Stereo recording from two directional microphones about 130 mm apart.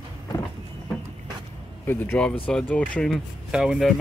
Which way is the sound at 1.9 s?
15° left (ahead or behind).